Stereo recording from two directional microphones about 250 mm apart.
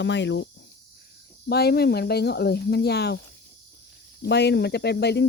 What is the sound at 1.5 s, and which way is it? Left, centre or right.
Speech, left.